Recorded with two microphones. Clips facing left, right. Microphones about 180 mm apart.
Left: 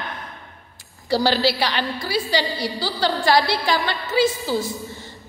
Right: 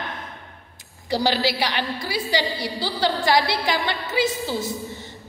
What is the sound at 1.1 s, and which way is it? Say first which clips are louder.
A woman's voice: left 3 dB; 15° right (ahead or behind).